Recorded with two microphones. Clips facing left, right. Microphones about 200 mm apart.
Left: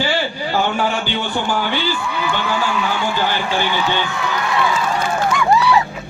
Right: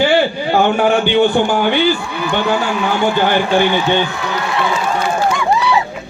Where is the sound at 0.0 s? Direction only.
55° right (ahead or behind).